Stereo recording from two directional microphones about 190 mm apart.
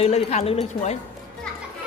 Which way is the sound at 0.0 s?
35° left (ahead or behind).